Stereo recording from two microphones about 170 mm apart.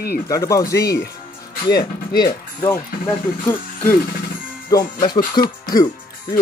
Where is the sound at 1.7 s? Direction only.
70° left (ahead or behind).